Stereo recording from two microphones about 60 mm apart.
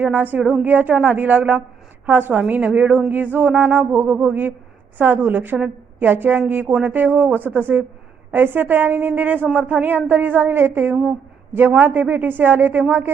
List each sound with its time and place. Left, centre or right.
0.0 s a woman's voice: right